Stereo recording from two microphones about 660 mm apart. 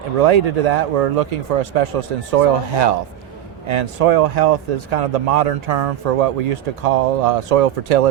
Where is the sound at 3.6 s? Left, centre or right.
Right.